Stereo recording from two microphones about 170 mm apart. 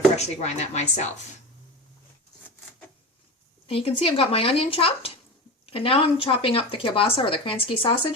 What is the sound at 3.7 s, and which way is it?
Speech, 35° left (ahead or behind).